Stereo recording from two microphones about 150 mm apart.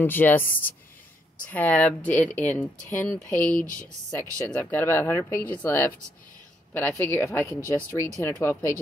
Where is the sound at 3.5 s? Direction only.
60° left (ahead or behind).